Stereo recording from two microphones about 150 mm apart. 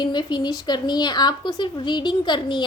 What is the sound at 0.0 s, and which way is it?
A woman's voice, 30° left (ahead or behind).